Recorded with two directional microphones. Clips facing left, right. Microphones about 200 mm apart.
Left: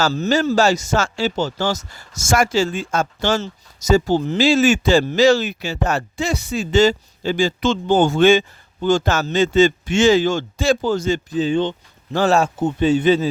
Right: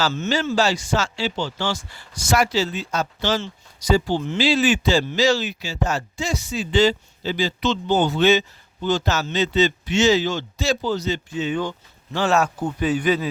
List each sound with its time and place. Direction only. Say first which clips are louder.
0.0 s speech: left 5 dB; 40° left (ahead or behind)
12.1 s speech: left 4 dB; 40° left (ahead or behind)
12.4 s speech: left 4 dB; 25° left (ahead or behind)